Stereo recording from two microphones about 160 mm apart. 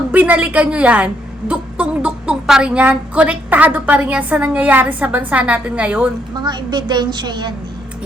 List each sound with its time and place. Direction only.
0.1 s a woman's voice: 10° right (ahead or behind)
6.3 s a woman's voice: 25° right (ahead or behind)